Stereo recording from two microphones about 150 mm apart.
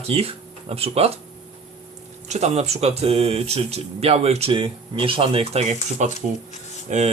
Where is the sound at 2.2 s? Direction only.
45° right (ahead or behind).